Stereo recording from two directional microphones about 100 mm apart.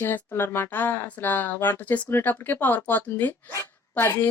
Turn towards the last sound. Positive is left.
turn(degrees=20)  # may be behind; listen again after turning